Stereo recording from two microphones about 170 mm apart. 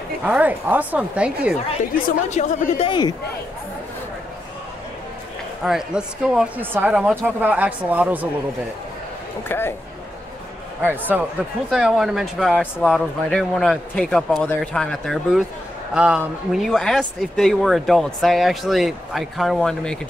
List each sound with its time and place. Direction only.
0.2 s speech: 10° right (ahead or behind)
2.0 s speech: 45° left (ahead or behind)
2.9 s a man's voice: 25° left (ahead or behind)
5.6 s speech: 5° right (ahead or behind)
9.5 s speech: 15° left (ahead or behind)
10.9 s speech: 10° right (ahead or behind)